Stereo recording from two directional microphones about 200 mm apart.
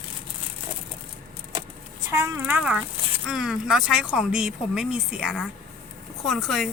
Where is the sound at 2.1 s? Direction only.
10° right (ahead or behind).